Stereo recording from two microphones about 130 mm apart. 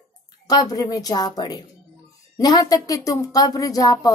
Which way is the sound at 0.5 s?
30° left (ahead or behind).